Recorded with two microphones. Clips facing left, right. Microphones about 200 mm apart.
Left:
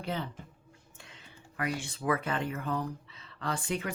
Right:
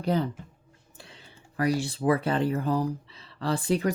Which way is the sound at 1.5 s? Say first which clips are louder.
Right 9 dB; 35° right (ahead or behind).